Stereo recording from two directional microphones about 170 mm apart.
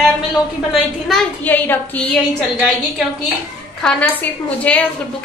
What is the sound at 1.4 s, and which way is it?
Speech, 10° left (ahead or behind).